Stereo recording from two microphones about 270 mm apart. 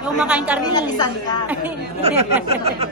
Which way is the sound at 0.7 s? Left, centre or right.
Centre.